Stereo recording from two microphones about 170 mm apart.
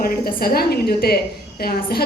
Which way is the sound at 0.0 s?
60° left (ahead or behind).